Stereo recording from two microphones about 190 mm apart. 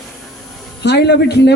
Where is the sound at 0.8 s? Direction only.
60° left (ahead or behind).